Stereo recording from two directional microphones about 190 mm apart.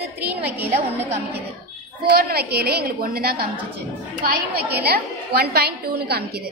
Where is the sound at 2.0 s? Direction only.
55° right (ahead or behind).